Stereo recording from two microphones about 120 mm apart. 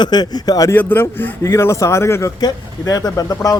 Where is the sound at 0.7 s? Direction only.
15° left (ahead or behind).